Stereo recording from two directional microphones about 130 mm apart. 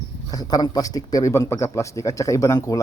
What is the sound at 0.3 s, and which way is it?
Speech, 30° left (ahead or behind).